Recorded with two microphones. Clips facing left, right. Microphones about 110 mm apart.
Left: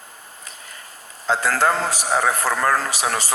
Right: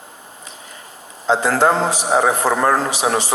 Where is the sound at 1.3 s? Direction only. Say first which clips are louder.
Right 4 dB; 25° right (ahead or behind).